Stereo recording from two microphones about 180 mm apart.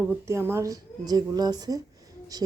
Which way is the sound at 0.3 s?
15° right (ahead or behind).